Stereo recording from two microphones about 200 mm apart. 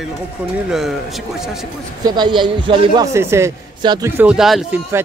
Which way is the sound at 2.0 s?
20° right (ahead or behind).